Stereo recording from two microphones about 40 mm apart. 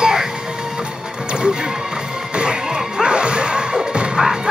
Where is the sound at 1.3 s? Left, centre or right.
Right.